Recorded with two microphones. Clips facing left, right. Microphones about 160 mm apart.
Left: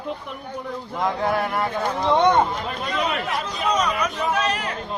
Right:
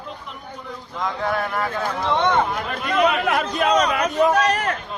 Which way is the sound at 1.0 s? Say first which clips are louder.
Left 1 dB; 25° left (ahead or behind).